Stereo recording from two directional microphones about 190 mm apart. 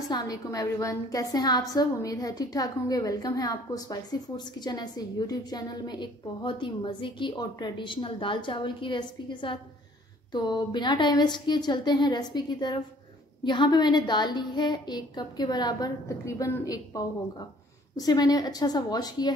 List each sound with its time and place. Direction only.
0.1 s a woman's voice: 20° left (ahead or behind)